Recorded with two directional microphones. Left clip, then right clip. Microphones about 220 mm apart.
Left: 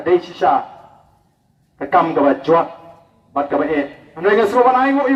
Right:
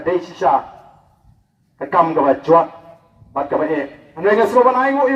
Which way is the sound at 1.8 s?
45° left (ahead or behind).